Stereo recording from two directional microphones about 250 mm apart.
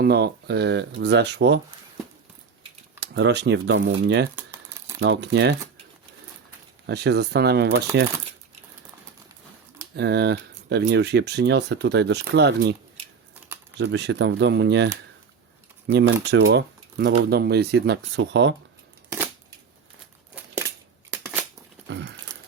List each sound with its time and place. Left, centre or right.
0.0 s speech: right
3.0 s speech: right
4.4 s crumpling: centre
4.9 s speech: right
6.8 s speech: right
9.9 s speech: right
13.7 s speech: right
21.8 s a sound: right